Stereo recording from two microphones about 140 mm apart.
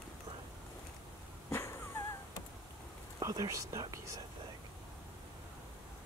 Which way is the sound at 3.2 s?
25° right (ahead or behind).